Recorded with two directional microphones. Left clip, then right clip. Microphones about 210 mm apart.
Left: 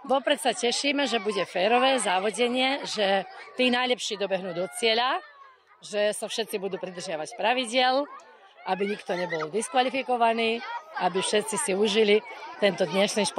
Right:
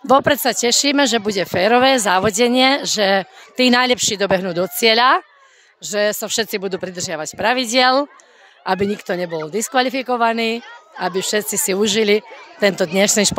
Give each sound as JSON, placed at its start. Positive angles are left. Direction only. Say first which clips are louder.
{"t": 0.1, "sound": "speech", "louder": "right 10 dB", "side_deg": -50}